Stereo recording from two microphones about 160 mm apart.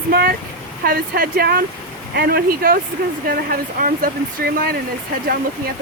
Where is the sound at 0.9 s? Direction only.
70° right (ahead or behind).